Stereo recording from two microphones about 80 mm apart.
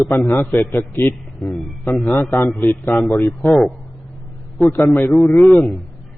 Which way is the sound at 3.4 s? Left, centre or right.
Centre.